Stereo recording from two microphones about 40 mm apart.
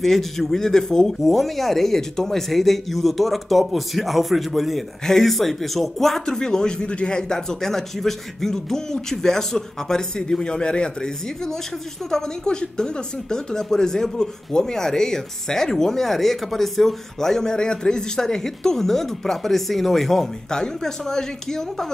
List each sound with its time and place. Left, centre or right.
0.0 s speech: centre
5.0 s speech: centre
6.2 s speech: centre